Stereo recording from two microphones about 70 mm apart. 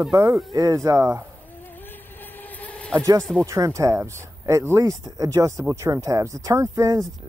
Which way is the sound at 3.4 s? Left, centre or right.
Right.